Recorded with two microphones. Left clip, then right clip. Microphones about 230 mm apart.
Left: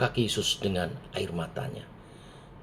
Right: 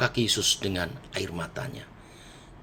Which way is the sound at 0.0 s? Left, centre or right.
Right.